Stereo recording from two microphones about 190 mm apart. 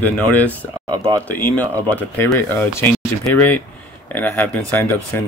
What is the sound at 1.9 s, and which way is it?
Speech, 10° left (ahead or behind).